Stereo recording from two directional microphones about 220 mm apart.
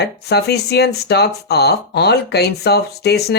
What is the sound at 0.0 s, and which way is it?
Speech, 50° left (ahead or behind).